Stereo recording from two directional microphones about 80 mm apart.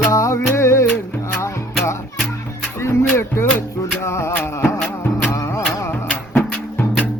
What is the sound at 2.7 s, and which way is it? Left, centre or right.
Music, left.